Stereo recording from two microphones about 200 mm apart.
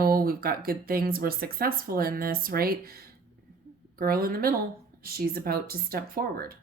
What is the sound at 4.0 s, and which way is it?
Speech, 45° right (ahead or behind).